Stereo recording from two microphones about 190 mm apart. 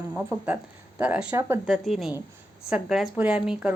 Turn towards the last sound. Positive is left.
turn(degrees=-5)  # may be behind; listen again after turning